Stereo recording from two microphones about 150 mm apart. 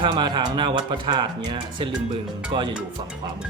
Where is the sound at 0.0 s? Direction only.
30° right (ahead or behind).